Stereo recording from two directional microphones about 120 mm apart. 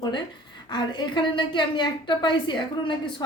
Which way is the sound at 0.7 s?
40° left (ahead or behind).